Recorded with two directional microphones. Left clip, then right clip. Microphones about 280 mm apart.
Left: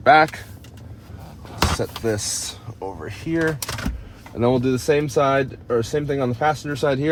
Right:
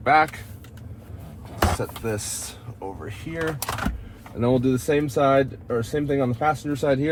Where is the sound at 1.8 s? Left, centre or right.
Left.